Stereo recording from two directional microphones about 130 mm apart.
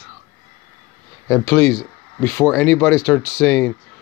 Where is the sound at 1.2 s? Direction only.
10° left (ahead or behind).